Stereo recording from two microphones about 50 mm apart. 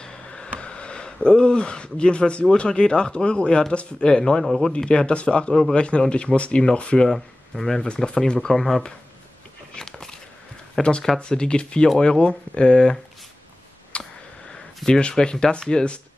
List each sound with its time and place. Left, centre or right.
0.0 s a sound: centre
2.5 s a man's voice: centre
7.1 s speech: centre
7.8 s speech: centre
9.8 s biting: centre
10.8 s a man's voice: centre
13.9 s a sound: left
15.0 s a man's voice: centre